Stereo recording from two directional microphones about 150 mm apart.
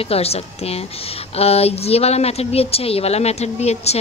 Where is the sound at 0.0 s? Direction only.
40° left (ahead or behind).